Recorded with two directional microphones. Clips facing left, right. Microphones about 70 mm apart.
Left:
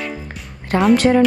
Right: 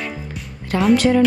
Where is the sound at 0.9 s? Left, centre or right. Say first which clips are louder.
Left 1 dB; left.